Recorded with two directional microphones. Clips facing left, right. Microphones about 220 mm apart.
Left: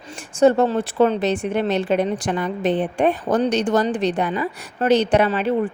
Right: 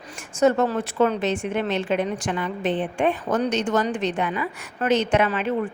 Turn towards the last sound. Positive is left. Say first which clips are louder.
# left 4 dB
turn(degrees=35)  # may be behind; listen again after turning